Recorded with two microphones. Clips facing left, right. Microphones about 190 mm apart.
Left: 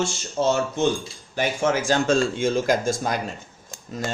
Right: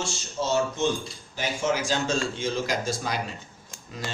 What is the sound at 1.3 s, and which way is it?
Speech, 55° left (ahead or behind).